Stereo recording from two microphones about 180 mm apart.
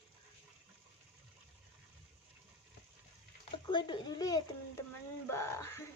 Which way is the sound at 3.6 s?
25° left (ahead or behind).